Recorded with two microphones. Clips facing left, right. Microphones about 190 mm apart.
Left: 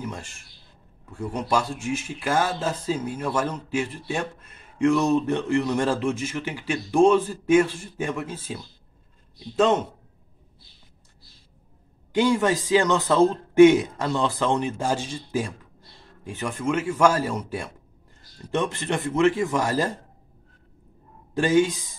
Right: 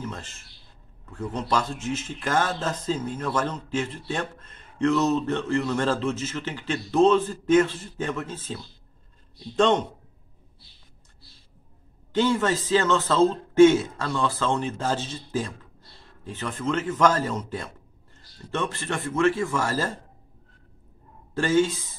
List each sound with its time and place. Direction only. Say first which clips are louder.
0.0 s a man's voice: left 1 dB; 10° left (ahead or behind)
12.1 s a man's voice: left 2 dB; 15° left (ahead or behind)
21.4 s a man's voice: left 2 dB; 15° left (ahead or behind)